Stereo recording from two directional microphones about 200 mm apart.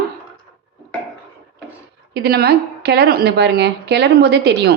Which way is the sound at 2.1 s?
55° right (ahead or behind).